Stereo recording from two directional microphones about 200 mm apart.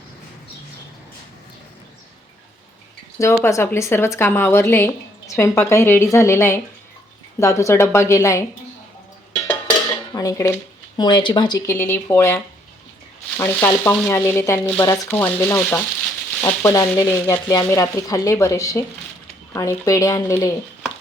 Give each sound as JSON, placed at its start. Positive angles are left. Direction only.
{"t": 3.2, "sound": "frying", "side_deg": 15}
{"t": 10.1, "sound": "frying", "side_deg": 15}
{"t": 13.4, "sound": "frying", "side_deg": 10}